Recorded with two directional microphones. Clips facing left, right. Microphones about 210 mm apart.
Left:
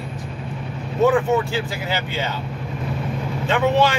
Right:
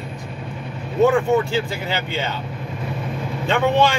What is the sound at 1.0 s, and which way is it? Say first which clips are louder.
Speech: even; centre (ahead or behind).